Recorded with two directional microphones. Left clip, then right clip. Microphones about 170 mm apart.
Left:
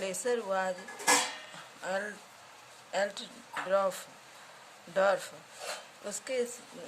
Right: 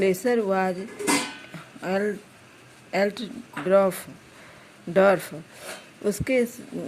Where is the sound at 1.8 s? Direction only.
30° right (ahead or behind).